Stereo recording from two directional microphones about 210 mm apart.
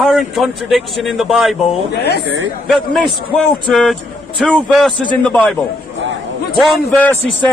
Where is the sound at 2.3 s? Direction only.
60° right (ahead or behind).